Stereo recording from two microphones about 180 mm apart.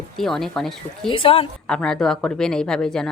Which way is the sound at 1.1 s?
30° left (ahead or behind).